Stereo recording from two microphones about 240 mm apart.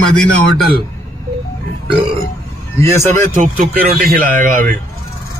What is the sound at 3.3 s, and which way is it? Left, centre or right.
Speech, right.